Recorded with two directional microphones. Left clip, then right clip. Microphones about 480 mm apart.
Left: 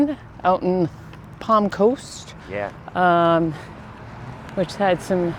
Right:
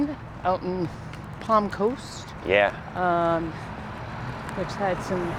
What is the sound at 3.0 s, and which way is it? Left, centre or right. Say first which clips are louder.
Speech: left 7 dB; left.